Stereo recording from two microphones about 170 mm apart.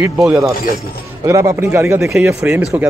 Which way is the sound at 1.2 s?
15° right (ahead or behind).